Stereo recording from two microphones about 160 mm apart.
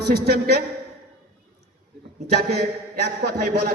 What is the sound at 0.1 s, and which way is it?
Speech, 75° right (ahead or behind).